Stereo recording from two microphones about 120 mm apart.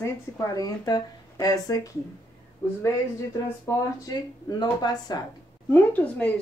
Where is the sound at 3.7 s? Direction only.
30° left (ahead or behind).